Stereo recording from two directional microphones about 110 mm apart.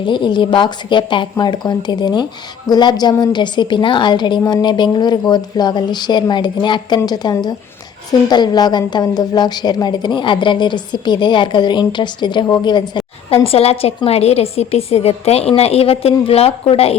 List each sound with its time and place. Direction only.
0.0 s a woman's voice: 45° left (ahead or behind)
13.3 s a woman's voice: 60° left (ahead or behind)